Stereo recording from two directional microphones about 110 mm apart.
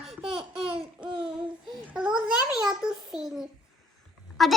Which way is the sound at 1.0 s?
50° right (ahead or behind).